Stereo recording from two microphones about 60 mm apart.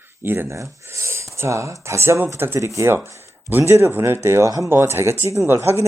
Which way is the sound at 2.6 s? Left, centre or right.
Right.